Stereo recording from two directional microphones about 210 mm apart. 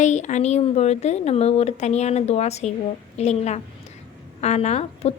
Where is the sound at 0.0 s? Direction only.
35° left (ahead or behind).